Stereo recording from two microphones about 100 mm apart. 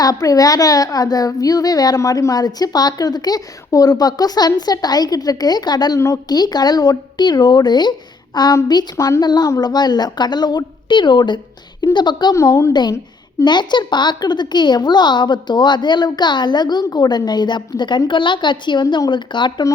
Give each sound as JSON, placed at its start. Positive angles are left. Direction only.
{"t": 0.0, "sound": "a child's voice", "side_deg": 40}
{"t": 12.3, "sound": "a child's voice", "side_deg": 35}
{"t": 13.4, "sound": "a woman's voice", "side_deg": 50}